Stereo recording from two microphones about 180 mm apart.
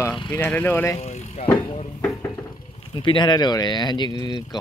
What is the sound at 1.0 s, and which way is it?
Vehicle, 35° left (ahead or behind).